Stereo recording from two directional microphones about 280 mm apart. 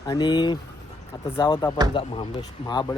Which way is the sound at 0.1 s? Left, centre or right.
Centre.